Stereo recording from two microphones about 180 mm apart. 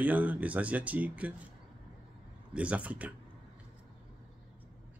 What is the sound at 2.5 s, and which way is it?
Speech, 5° right (ahead or behind).